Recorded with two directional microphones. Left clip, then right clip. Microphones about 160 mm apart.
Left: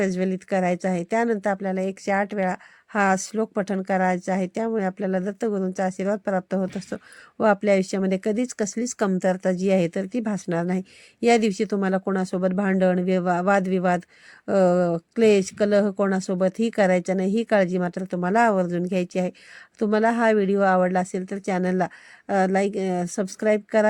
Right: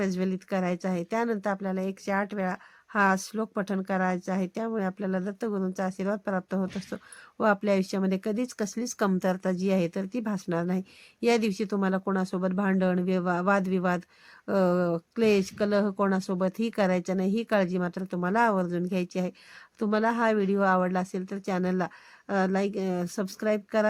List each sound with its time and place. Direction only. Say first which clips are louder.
0.0 s speech: left 6 dB; 20° left (ahead or behind)